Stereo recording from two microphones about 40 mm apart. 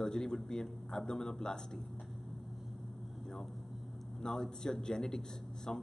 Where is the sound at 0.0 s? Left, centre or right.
Centre.